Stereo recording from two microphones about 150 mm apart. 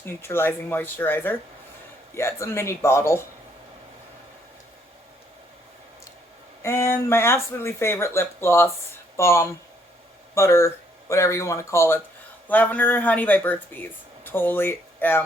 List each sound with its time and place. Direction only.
0.0 s speech: 15° left (ahead or behind)
6.6 s speech: 20° left (ahead or behind)